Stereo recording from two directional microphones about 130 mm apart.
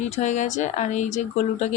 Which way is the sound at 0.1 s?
65° left (ahead or behind).